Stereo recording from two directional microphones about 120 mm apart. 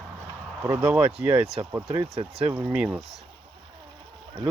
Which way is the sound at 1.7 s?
25° right (ahead or behind).